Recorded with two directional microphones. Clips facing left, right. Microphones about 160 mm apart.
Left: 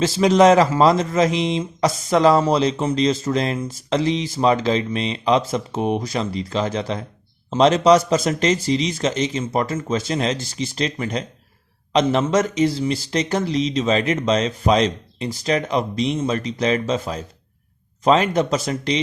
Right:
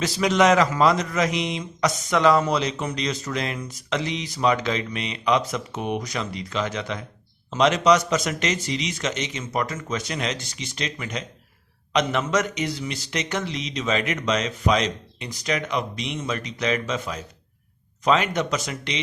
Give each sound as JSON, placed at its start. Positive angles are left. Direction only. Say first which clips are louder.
{"t": 0.0, "sound": "speech", "louder": "left 6 dB", "side_deg": 30}